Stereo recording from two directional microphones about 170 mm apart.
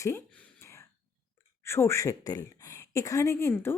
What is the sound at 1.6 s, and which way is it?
A woman's voice, 15° left (ahead or behind).